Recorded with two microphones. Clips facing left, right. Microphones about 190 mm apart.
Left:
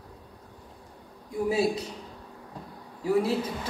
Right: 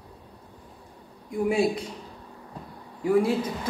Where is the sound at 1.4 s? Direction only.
25° right (ahead or behind).